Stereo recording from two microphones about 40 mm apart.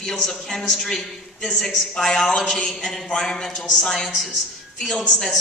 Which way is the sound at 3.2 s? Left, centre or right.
Centre.